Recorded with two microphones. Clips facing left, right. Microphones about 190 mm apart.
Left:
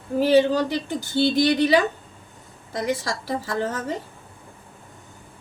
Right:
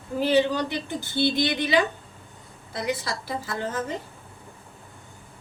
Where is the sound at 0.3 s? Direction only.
40° left (ahead or behind).